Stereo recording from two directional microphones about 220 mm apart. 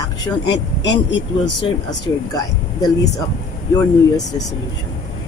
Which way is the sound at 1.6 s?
20° left (ahead or behind).